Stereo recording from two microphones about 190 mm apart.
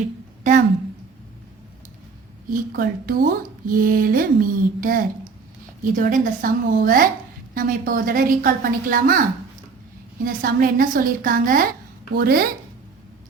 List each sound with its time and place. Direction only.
0.4 s a woman's voice: 40° right (ahead or behind)
2.5 s a woman's voice: 50° right (ahead or behind)
10.2 s a woman's voice: 50° right (ahead or behind)